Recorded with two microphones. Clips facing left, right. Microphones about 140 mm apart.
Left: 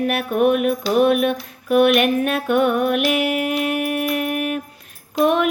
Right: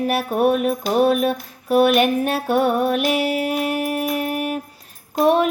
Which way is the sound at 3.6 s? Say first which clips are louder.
Left 1 dB; 35° right (ahead or behind).